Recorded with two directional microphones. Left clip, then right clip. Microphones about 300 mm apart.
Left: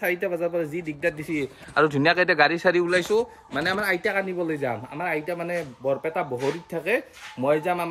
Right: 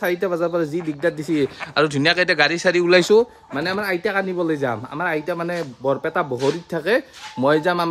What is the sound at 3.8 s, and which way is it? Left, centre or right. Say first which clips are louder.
Speech: right 5 dB; right.